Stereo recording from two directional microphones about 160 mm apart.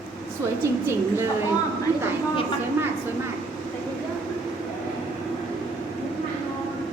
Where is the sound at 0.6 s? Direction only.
15° right (ahead or behind).